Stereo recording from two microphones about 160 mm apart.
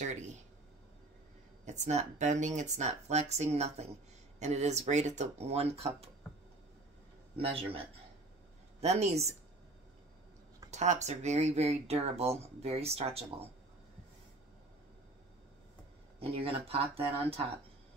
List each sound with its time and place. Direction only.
1.7 s speech: 45° right (ahead or behind)
7.3 s speech: 35° right (ahead or behind)
8.8 s speech: 40° right (ahead or behind)
10.7 s speech: 45° right (ahead or behind)
16.2 s speech: 35° right (ahead or behind)